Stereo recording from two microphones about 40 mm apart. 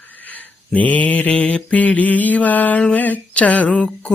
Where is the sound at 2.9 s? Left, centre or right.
Left.